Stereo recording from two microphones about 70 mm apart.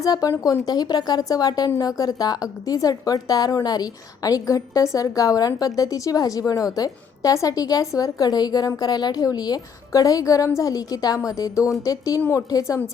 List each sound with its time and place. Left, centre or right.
0.0 s a woman's voice: left
0.6 s a woman's voice: left